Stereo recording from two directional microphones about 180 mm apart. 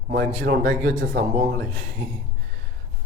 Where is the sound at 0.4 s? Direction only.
55° right (ahead or behind).